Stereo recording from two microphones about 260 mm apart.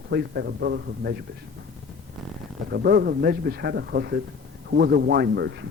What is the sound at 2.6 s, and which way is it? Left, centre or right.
Speech, right.